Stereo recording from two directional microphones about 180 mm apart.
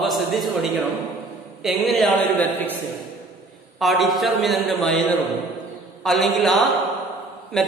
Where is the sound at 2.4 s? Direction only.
10° left (ahead or behind).